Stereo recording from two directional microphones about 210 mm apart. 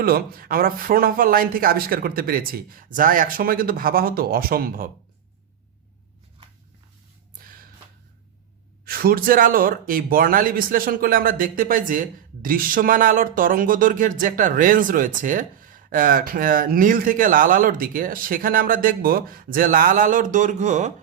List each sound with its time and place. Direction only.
0.0 s speech: 45° right (ahead or behind)
7.4 s gasp: 40° right (ahead or behind)
8.8 s speech: 45° right (ahead or behind)